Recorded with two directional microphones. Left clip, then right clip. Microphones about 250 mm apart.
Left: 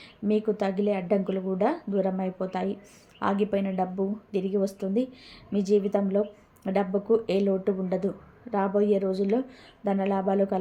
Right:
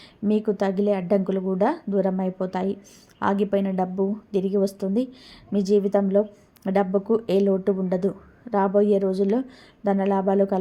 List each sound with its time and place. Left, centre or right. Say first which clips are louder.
0.3 s speech: right 3 dB; right